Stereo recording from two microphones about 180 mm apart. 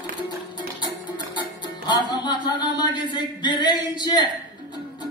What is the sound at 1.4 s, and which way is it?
Music, 25° left (ahead or behind).